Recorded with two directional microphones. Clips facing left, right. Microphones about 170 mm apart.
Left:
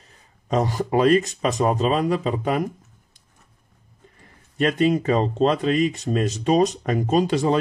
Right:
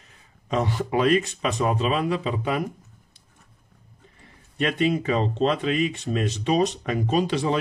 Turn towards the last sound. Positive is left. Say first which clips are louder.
# left 3 dB
turn(degrees=45)  # may be behind; listen again after turning